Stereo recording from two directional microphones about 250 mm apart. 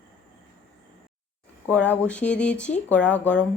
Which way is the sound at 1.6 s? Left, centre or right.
Centre.